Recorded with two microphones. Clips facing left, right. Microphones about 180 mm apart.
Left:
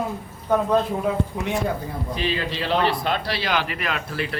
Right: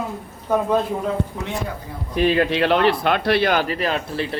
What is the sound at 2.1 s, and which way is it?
Speech, 55° right (ahead or behind).